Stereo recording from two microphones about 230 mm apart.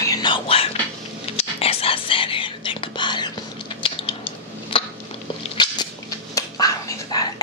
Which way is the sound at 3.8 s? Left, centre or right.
Left.